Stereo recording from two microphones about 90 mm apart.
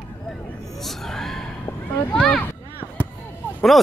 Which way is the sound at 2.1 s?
15° left (ahead or behind).